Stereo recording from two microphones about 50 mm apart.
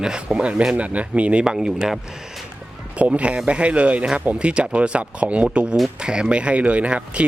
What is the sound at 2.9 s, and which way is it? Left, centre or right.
Speech, right.